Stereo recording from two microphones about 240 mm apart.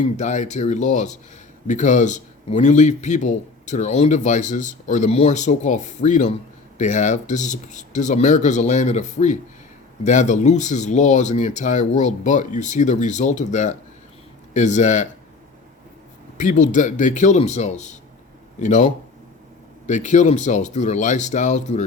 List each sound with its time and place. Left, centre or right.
0.0 s speech: left
16.4 s speech: left
19.9 s speech: left